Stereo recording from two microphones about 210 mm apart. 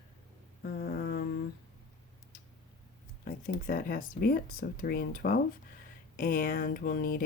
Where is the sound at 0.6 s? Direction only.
45° left (ahead or behind).